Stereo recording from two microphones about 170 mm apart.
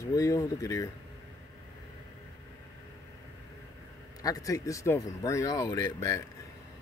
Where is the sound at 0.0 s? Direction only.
20° left (ahead or behind).